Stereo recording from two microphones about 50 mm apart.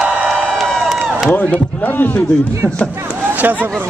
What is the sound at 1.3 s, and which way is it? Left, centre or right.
Speech, left.